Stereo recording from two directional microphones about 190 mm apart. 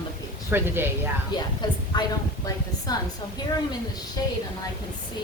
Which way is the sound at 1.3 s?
25° left (ahead or behind).